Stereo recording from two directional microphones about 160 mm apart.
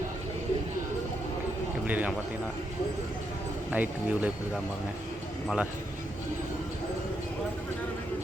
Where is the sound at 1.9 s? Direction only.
10° right (ahead or behind).